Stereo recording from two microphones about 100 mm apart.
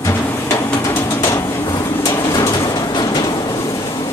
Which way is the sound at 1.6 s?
40° left (ahead or behind).